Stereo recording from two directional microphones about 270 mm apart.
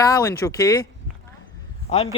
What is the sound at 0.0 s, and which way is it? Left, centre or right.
Speech, centre.